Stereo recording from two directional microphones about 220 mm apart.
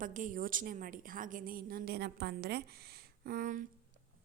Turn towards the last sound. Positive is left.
turn(degrees=-40)  # may be behind; listen again after turning